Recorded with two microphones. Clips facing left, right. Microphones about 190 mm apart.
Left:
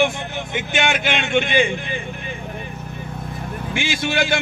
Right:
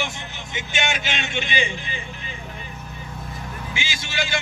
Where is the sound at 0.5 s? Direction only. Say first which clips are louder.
Left 5 dB; 55° left (ahead or behind).